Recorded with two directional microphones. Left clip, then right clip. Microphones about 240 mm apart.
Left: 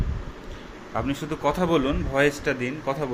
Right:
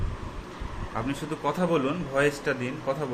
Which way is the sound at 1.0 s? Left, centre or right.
Centre.